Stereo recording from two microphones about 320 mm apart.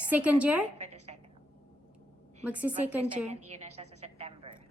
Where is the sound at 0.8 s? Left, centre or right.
Right.